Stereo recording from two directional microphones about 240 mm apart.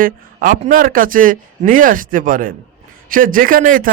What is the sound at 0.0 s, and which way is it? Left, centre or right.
A man's voice, right.